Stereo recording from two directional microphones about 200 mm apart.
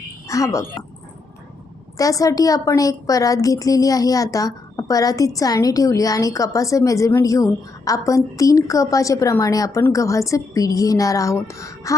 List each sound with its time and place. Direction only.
0.3 s speech: 15° left (ahead or behind)
2.0 s a woman's voice: 15° left (ahead or behind)